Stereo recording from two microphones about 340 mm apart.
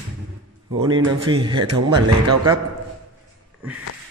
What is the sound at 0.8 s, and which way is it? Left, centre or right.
Speech, centre.